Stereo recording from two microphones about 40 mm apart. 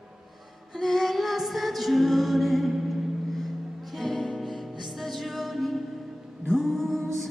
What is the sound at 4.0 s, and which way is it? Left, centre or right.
Music, centre.